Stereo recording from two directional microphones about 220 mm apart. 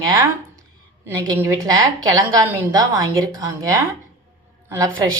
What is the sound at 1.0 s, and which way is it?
A woman's voice, 10° right (ahead or behind).